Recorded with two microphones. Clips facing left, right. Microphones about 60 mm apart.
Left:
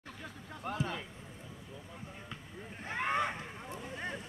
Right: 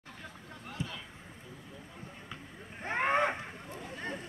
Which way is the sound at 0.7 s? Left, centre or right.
Left.